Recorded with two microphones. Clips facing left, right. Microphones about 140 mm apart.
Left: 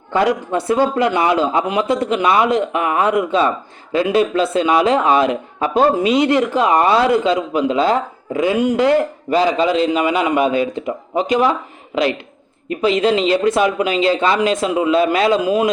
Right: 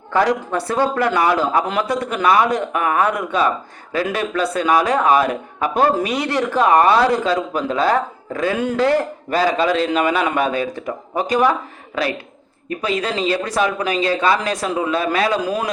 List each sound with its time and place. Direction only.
0.1 s a man's voice: 20° left (ahead or behind)